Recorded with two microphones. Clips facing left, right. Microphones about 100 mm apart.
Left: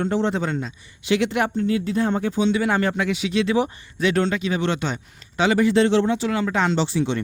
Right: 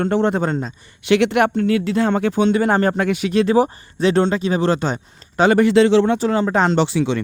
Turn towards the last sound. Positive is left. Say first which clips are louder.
# right 4 dB
turn(degrees=-90)